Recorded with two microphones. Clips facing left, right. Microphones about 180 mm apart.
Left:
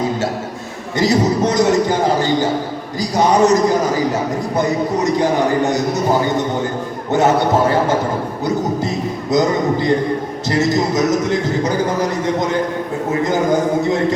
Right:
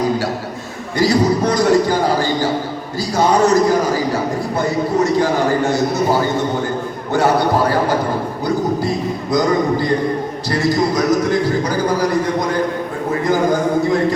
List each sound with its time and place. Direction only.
0.9 s a man's voice: 20° left (ahead or behind)
7.1 s a man's voice: 20° left (ahead or behind)
9.3 s a man's voice: 20° left (ahead or behind)